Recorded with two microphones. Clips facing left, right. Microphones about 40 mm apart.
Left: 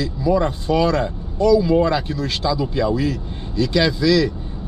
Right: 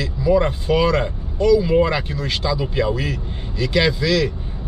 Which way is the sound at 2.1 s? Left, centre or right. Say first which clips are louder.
Left 1 dB; centre.